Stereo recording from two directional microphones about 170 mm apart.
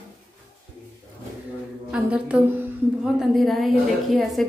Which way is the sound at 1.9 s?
5° right (ahead or behind).